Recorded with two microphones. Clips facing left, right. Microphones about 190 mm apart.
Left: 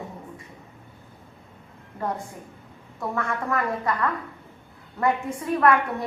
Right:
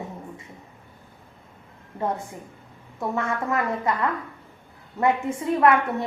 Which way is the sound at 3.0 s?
20° right (ahead or behind).